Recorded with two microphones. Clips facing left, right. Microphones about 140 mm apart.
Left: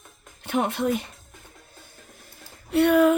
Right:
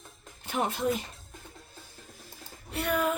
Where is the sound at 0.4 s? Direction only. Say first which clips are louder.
Left 6 dB; 65° left (ahead or behind).